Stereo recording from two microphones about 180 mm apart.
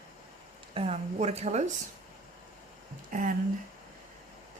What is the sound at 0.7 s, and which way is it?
Speech, 35° right (ahead or behind).